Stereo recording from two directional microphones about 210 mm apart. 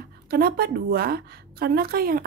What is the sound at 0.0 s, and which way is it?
A woman's voice, 45° right (ahead or behind).